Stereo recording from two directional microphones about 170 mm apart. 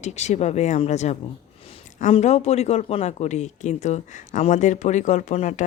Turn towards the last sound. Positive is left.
turn(degrees=40)  # may be behind; listen again after turning